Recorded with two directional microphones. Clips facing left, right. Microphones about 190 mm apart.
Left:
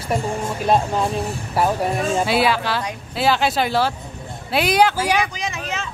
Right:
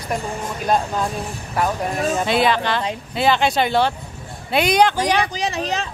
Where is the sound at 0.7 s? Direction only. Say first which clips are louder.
Left 2 dB; 5° left (ahead or behind).